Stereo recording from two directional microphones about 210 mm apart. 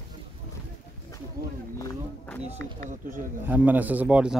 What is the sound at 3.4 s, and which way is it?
Speech, 10° right (ahead or behind).